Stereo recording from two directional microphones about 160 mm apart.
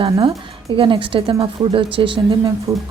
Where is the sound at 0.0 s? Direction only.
35° right (ahead or behind).